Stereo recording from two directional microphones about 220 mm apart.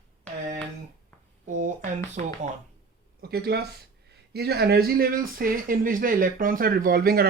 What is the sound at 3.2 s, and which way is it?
A woman's voice, 45° right (ahead or behind).